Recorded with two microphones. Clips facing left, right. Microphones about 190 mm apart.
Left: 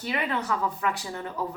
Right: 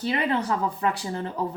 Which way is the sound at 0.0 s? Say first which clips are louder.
Right 4 dB; 30° right (ahead or behind).